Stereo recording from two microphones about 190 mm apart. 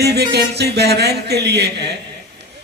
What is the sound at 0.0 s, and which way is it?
A man's voice, 60° right (ahead or behind).